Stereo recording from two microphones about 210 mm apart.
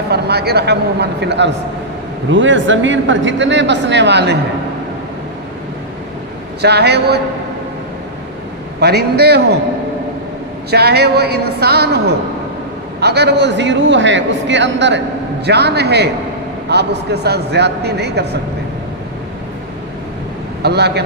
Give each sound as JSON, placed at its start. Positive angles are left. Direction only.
{"t": 0.1, "sound": "a man's voice", "side_deg": -50}
{"t": 6.6, "sound": "a man's voice", "side_deg": -50}
{"t": 8.8, "sound": "a man's voice", "side_deg": -50}
{"t": 10.7, "sound": "a man's voice", "side_deg": -50}
{"t": 20.6, "sound": "a man's voice", "side_deg": -50}